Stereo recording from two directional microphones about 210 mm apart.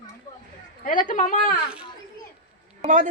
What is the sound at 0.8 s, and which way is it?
Speech, 40° left (ahead or behind).